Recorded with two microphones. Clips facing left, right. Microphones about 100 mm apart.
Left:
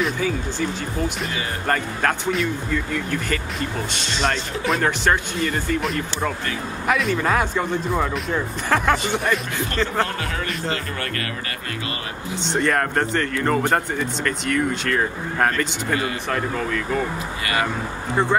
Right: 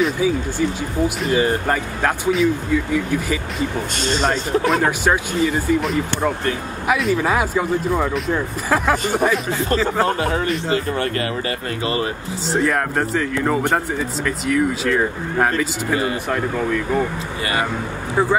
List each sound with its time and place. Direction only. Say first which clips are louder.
0.0 s speech: right 4 dB; 10° right (ahead or behind)
3.9 s speech: right 7 dB; 45° right (ahead or behind)
4.2 s speech: right 4 dB; centre (ahead or behind)
8.9 s speech: right 2 dB; 40° right (ahead or behind)
9.2 s speech: right 4 dB; centre (ahead or behind)
10.0 s speech: right 8 dB; 30° right (ahead or behind)
12.5 s speech: right 1 dB; 5° right (ahead or behind)